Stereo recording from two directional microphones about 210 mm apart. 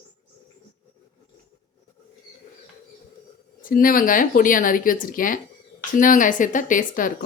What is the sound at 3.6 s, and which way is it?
A woman's voice, 40° left (ahead or behind).